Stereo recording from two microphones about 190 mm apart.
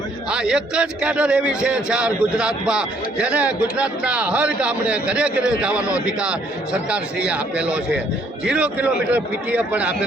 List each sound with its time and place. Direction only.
0.3 s a man's voice: 5° right (ahead or behind)